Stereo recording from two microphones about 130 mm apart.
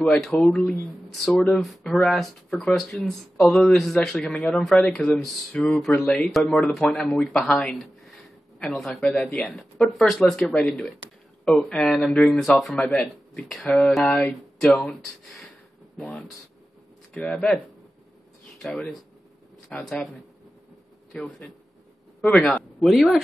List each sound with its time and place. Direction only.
0.0 s speech: 5° left (ahead or behind)
18.6 s speech: 5° left (ahead or behind)